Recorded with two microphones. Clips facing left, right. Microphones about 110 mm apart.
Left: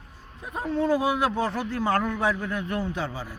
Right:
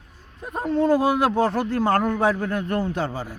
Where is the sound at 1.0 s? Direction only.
65° right (ahead or behind).